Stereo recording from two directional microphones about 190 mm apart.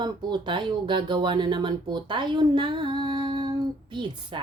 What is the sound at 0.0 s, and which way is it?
Speech, 20° right (ahead or behind).